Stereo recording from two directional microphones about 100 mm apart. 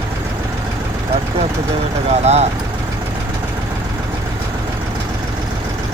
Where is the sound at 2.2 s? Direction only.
90° right.